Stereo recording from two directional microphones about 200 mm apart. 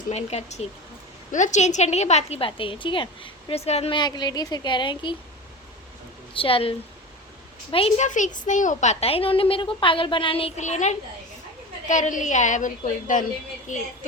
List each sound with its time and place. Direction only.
0.1 s a woman's voice: 30° left (ahead or behind)
6.3 s a woman's voice: 25° left (ahead or behind)